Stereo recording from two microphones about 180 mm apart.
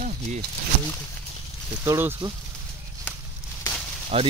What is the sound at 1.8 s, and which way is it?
Speech, 15° right (ahead or behind).